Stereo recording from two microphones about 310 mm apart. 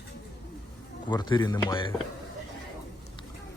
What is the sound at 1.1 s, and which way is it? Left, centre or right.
Speech, centre.